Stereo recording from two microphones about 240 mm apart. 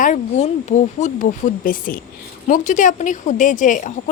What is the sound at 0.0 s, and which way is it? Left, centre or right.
A woman's voice, left.